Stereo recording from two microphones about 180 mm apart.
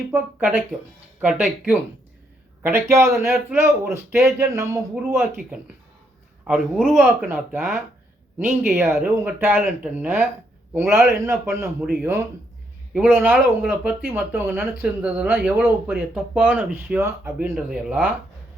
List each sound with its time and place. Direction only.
0.1 s speech: 10° right (ahead or behind)
6.5 s speech: 5° right (ahead or behind)
12.9 s a man's voice: 10° right (ahead or behind)